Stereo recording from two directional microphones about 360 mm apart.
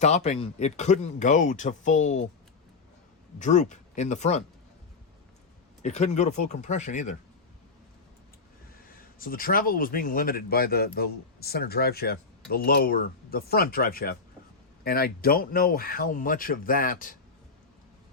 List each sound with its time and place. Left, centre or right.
0.0 s speech: centre
3.3 s speech: centre
5.8 s speech: centre
9.0 s speech: left